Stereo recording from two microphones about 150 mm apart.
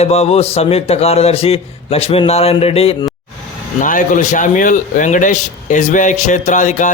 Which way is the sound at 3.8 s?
60° left (ahead or behind).